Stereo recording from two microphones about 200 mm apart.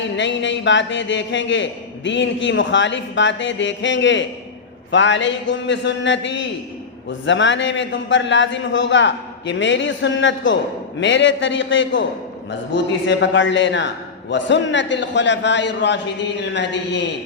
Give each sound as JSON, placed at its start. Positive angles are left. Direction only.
{"t": 0.0, "sound": "a man's voice", "side_deg": 65}